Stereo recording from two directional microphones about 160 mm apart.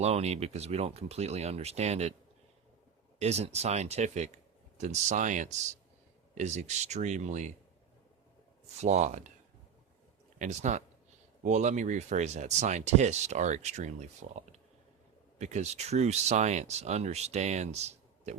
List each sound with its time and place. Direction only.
0.0 s speech: 40° right (ahead or behind)
3.2 s speech: 40° right (ahead or behind)
8.8 s speech: 50° right (ahead or behind)
10.3 s speech: 50° right (ahead or behind)